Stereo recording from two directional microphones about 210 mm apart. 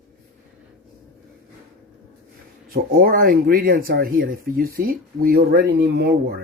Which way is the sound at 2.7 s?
45° right (ahead or behind).